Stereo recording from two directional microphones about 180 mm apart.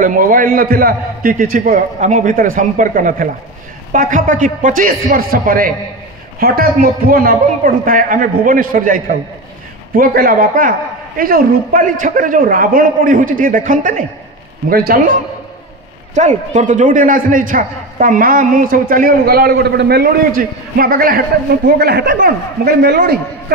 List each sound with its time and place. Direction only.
0.0 s a man's voice: 50° right (ahead or behind)
16.2 s a man's voice: 40° right (ahead or behind); by 23.1 s 65° right (ahead or behind)